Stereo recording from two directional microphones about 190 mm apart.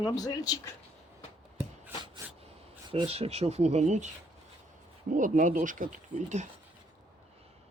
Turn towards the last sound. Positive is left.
turn(degrees=-40)  # may be behind; listen again after turning